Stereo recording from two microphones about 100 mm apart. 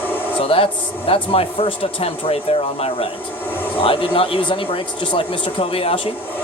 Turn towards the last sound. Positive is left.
turn(degrees=70)  # may be behind; listen again after turning